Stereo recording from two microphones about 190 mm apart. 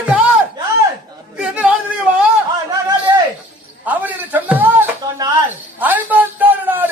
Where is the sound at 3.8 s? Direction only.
10° right (ahead or behind).